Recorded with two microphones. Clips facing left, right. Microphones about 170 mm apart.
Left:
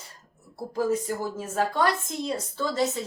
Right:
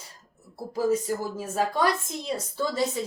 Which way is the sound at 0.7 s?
10° right (ahead or behind).